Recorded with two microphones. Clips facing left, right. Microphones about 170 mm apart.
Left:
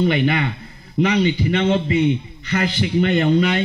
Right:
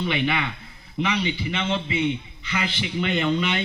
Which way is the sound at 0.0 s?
45° left (ahead or behind).